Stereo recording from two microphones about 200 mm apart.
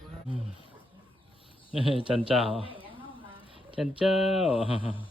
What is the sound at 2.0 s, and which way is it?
Speech, 25° right (ahead or behind).